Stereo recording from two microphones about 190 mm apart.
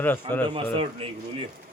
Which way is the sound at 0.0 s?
10° left (ahead or behind).